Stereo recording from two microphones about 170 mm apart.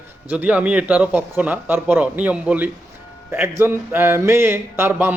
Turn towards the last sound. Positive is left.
turn(degrees=-15)  # may be behind; listen again after turning